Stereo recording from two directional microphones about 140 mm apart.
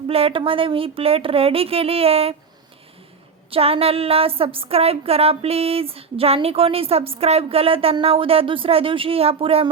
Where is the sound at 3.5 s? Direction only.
45° right (ahead or behind).